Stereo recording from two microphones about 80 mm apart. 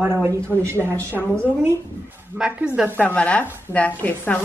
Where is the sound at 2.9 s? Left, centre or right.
Centre.